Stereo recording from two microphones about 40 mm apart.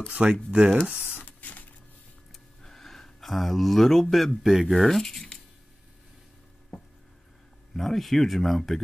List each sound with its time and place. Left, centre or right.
0.1 s speech: right
1.0 s a sound: left
2.6 s speech: centre
7.7 s speech: centre